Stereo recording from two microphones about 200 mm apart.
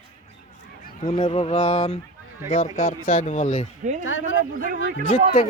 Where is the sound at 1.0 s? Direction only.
30° left (ahead or behind).